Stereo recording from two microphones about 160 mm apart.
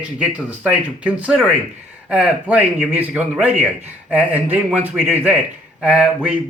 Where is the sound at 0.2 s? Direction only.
10° right (ahead or behind).